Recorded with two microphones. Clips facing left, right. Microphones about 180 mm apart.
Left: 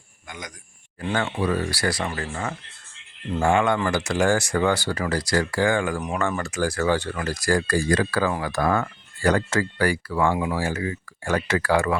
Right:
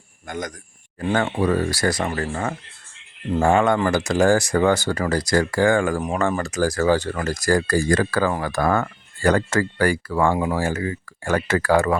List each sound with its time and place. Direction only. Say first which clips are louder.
0.3 s speech: right 9 dB; 50° right (ahead or behind)
6.0 s speech: right 3 dB; 35° right (ahead or behind)